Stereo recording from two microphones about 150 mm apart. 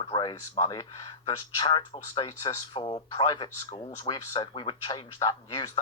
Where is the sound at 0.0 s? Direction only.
30° left (ahead or behind).